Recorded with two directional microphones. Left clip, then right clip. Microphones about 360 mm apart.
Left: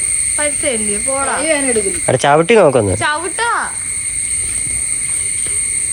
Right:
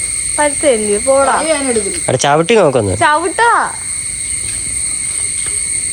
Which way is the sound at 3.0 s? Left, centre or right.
Right.